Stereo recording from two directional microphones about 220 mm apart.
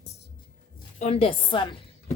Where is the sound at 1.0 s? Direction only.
25° left (ahead or behind).